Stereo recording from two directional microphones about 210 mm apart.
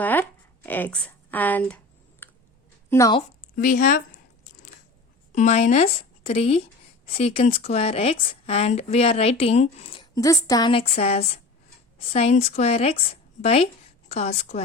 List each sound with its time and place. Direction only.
0.0 s a sound: 10° left (ahead or behind)
2.9 s speech: 15° left (ahead or behind)
3.5 s speech: 40° left (ahead or behind)
5.3 s a woman's voice: 35° left (ahead or behind)